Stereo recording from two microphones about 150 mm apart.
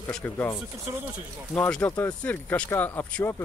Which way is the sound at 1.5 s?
10° left (ahead or behind).